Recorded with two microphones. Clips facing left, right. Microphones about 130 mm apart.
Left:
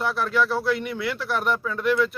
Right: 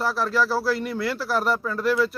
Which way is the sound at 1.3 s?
35° right (ahead or behind).